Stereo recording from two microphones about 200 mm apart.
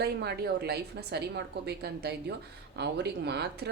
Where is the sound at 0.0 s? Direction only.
55° right (ahead or behind).